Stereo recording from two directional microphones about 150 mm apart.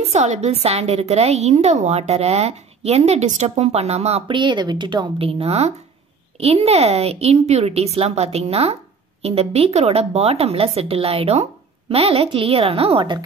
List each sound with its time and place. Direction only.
0.1 s a woman's voice: 50° right (ahead or behind)
4.3 s a woman's voice: 30° right (ahead or behind)